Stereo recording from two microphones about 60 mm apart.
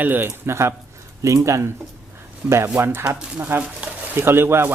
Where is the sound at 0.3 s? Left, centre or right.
Right.